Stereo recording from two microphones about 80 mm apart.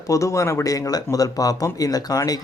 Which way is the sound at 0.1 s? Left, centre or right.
Left.